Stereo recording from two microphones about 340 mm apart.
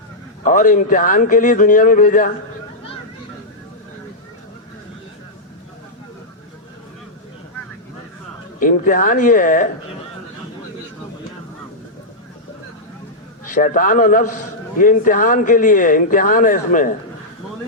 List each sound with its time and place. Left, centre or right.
0.4 s speech: left
8.5 s speech: left
13.5 s speech: left